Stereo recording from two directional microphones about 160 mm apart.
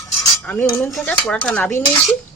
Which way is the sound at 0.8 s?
5° left (ahead or behind).